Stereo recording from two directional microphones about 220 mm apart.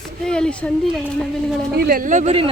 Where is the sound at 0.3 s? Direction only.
5° left (ahead or behind).